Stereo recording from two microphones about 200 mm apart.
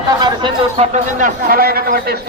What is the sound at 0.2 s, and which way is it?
A man's voice, 20° right (ahead or behind).